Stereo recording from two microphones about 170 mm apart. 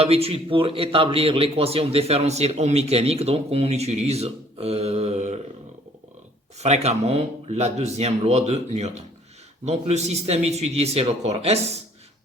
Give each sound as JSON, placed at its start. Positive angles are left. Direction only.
{"t": 0.0, "sound": "a man's voice", "side_deg": -35}
{"t": 6.6, "sound": "a man's voice", "side_deg": -40}